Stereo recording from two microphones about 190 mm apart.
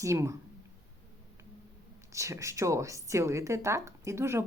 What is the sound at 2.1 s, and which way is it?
Speech, 15° right (ahead or behind).